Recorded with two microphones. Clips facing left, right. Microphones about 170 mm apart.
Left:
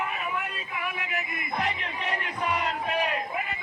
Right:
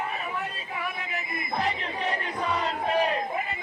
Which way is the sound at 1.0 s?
30° right (ahead or behind).